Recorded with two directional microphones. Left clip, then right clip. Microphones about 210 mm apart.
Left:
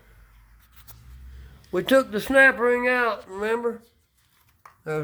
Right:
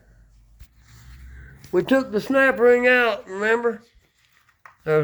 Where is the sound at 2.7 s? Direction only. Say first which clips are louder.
Right 5 dB; centre (ahead or behind).